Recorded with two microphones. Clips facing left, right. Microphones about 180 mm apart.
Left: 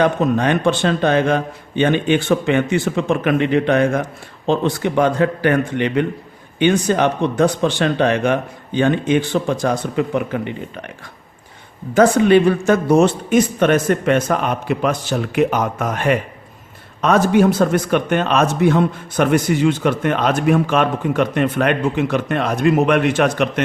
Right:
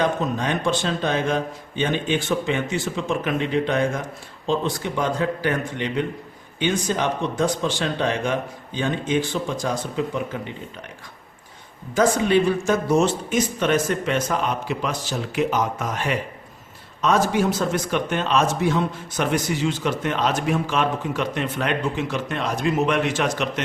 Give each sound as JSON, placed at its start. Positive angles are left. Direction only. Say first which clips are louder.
{"t": 0.0, "sound": "a man's voice", "louder": "left 7 dB", "side_deg": 65}
{"t": 11.9, "sound": "a man's voice", "louder": "left 6 dB", "side_deg": 60}